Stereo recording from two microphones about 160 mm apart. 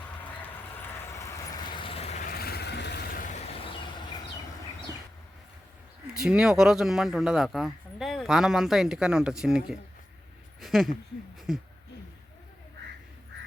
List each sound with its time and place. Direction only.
0.4 s vehicle: 15° left (ahead or behind); by 2.1 s 35° left (ahead or behind)
2.2 s vehicle: 75° left (ahead or behind)
6.1 s speech: 5° right (ahead or behind)